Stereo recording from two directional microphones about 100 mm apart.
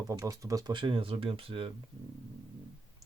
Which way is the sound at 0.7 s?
55° right (ahead or behind).